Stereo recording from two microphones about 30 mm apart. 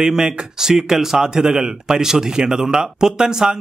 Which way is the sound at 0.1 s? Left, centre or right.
Centre.